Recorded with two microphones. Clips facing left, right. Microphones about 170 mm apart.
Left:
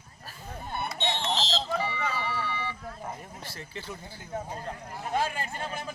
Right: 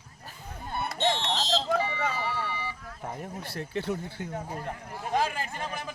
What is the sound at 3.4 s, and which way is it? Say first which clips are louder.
Speech: right 10 dB; 60° right (ahead or behind).